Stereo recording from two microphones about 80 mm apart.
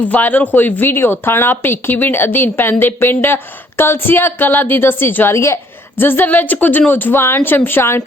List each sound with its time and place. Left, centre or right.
0.0 s a woman's voice: left